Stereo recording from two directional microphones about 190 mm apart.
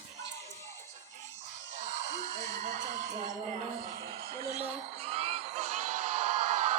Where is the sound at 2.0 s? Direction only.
40° right (ahead or behind).